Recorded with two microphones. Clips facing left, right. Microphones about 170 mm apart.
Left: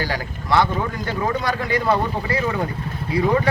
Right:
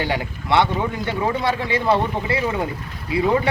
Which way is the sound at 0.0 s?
25° right (ahead or behind).